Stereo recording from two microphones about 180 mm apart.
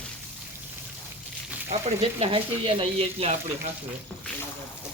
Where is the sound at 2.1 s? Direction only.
35° right (ahead or behind).